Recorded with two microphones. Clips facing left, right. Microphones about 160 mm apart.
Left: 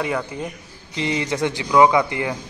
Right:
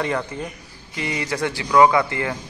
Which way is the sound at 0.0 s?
10° left (ahead or behind).